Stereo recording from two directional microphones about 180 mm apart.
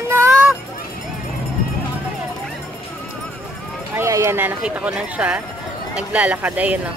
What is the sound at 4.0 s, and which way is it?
Speech, 15° right (ahead or behind).